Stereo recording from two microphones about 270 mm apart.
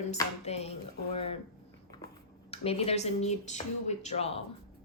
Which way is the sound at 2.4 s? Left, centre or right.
Left.